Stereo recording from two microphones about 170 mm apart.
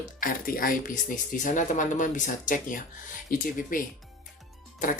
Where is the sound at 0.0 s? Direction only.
55° left (ahead or behind).